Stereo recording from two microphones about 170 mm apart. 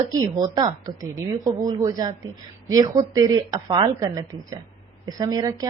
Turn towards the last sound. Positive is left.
turn(degrees=-20)  # may be behind; listen again after turning